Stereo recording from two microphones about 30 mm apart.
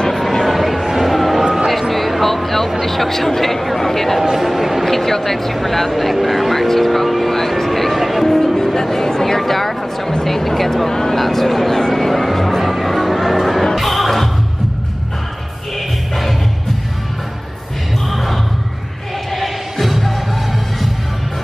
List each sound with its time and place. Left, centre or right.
0.1 s a sound: centre
0.5 s a sound: centre
0.8 s music: centre
2.8 s speech: centre
4.2 s speech: centre
4.8 s speech: centre
8.5 s speech: centre
9.4 s speech: centre
10.9 s speech: centre
11.1 s speech: centre
11.9 s music: centre
18.1 s a sound: centre
19.3 s music: centre